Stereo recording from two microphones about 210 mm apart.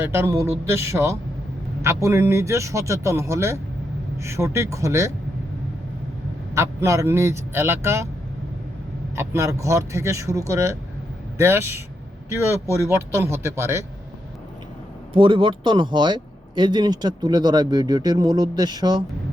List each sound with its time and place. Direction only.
0.0 s speech: 10° right (ahead or behind)
6.5 s speech: 15° right (ahead or behind)
9.1 s speech: 15° right (ahead or behind)
15.1 s speech: 25° right (ahead or behind)